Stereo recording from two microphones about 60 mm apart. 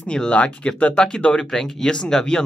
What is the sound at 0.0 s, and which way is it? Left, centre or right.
Speech, centre.